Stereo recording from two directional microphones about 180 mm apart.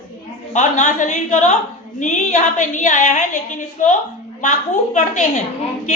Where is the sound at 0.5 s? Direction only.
40° left (ahead or behind).